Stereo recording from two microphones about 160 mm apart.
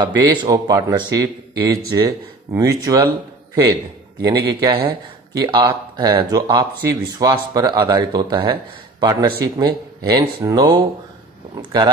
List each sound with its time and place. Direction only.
0.2 s speech: 25° right (ahead or behind)
4.2 s speech: 25° right (ahead or behind)